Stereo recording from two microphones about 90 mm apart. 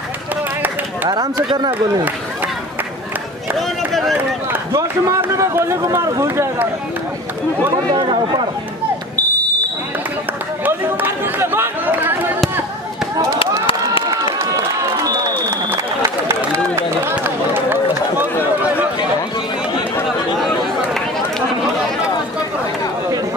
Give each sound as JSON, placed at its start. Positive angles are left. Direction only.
{"t": 1.0, "sound": "speech", "side_deg": -50}
{"t": 3.5, "sound": "run", "side_deg": 0}
{"t": 4.7, "sound": "a man's voice", "side_deg": -35}
{"t": 7.9, "sound": "speech", "side_deg": -70}
{"t": 10.6, "sound": "speech", "side_deg": -20}
{"t": 13.4, "sound": "a sound", "side_deg": 80}
{"t": 16.3, "sound": "a sound", "side_deg": -25}
{"t": 17.2, "sound": "run", "side_deg": -20}